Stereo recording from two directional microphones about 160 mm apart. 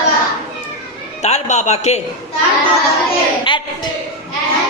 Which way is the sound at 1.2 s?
45° left (ahead or behind).